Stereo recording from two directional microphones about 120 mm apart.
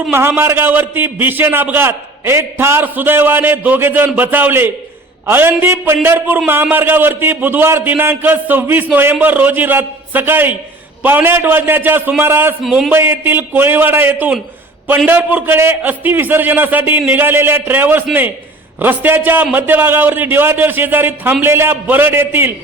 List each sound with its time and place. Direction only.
0.1 s a man's voice: 20° right (ahead or behind)
12.6 s a man's voice: centre (ahead or behind)
12.9 s a man's voice: 20° right (ahead or behind)